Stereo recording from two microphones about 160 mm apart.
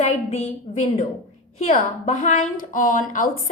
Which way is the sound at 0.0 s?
45° left (ahead or behind).